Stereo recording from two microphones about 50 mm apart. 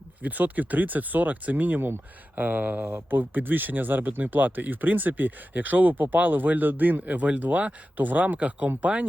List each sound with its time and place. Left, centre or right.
0.2 s speech: right